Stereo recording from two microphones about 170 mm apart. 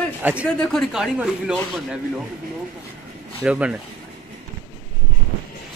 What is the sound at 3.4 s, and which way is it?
Speech, 5° right (ahead or behind).